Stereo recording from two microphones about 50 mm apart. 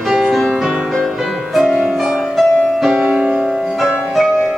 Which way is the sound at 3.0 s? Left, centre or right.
Right.